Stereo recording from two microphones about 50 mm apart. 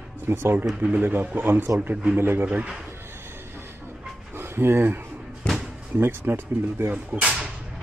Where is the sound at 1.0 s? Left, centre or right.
Right.